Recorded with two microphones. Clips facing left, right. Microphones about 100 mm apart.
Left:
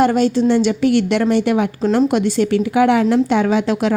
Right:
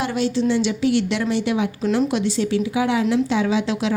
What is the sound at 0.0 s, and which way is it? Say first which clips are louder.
A woman's voice: left 7 dB; 50° left (ahead or behind).